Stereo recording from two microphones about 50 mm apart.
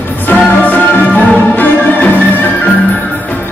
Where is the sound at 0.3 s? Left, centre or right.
Left.